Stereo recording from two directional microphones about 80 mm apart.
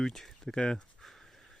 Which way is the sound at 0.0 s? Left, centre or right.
Centre.